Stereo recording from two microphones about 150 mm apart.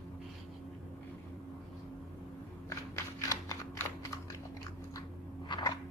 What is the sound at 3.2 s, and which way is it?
Typing, 20° left (ahead or behind).